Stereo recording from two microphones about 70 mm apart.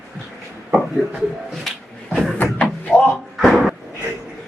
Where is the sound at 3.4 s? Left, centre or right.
Centre.